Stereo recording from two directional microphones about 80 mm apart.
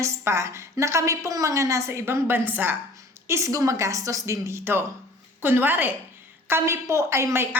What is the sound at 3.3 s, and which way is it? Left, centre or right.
A woman's voice, right.